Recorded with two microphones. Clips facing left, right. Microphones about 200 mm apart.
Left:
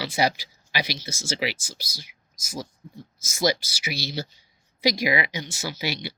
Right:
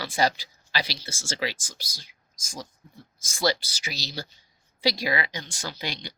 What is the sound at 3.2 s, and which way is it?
Speech, 10° left (ahead or behind).